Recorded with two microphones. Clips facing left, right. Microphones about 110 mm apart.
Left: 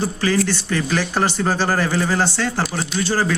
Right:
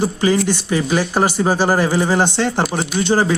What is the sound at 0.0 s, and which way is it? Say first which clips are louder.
Speech: right 3 dB; 15° right (ahead or behind).